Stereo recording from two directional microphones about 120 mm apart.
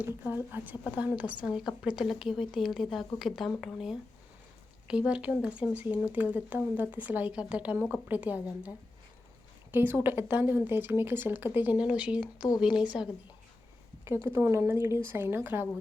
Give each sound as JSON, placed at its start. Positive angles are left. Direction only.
{"t": 0.5, "sound": "speech", "side_deg": -15}
{"t": 9.7, "sound": "speech", "side_deg": -15}
{"t": 14.0, "sound": "speech", "side_deg": -20}